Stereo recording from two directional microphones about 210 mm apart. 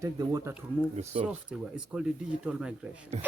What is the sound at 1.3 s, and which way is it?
Speech, 5° right (ahead or behind).